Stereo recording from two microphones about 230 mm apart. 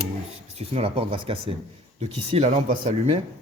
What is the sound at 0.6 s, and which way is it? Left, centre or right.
Speech, right.